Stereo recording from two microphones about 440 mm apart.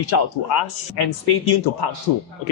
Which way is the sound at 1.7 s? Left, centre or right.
Left.